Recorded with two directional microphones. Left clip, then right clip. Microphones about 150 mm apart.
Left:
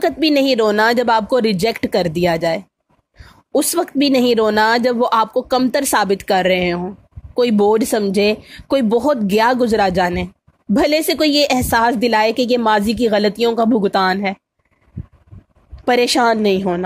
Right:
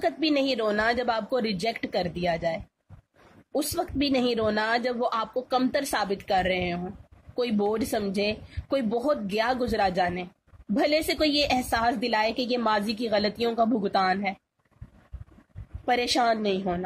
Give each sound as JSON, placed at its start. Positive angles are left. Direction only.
{"t": 0.0, "sound": "speech", "side_deg": 60}
{"t": 15.8, "sound": "speech", "side_deg": 60}